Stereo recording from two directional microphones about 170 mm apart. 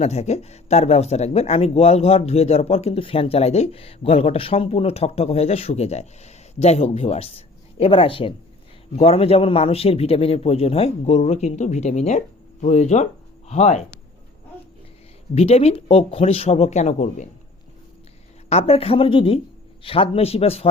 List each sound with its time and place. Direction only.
0.0 s speech: 40° left (ahead or behind)
15.4 s speech: 35° left (ahead or behind)
18.4 s speech: 35° left (ahead or behind)